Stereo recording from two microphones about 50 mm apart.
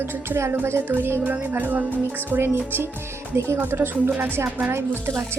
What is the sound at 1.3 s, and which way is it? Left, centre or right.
A woman's voice, right.